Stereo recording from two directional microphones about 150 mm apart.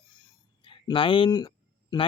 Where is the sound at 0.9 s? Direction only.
35° left (ahead or behind).